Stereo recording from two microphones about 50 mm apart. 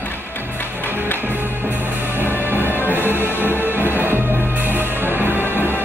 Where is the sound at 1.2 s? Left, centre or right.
Right.